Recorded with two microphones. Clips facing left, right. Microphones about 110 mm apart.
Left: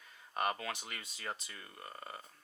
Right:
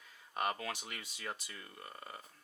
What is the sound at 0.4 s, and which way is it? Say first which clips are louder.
Speech: left 1 dB; 25° left (ahead or behind).